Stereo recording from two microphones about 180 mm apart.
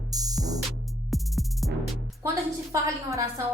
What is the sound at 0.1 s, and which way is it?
Music, 20° right (ahead or behind).